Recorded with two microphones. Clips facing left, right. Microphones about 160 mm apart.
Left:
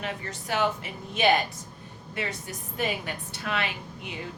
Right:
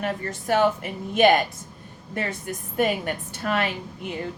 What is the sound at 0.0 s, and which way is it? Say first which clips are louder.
A woman's voice: right 6 dB; 50° right (ahead or behind).